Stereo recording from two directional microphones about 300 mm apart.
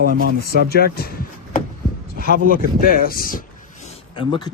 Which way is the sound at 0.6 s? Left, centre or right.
Left.